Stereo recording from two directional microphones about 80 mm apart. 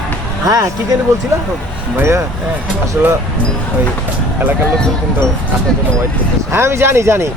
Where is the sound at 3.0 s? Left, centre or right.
Right.